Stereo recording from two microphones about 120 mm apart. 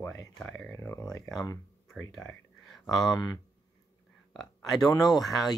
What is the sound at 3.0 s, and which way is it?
Speech, 35° left (ahead or behind).